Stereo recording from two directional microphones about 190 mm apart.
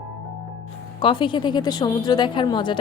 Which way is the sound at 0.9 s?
25° left (ahead or behind).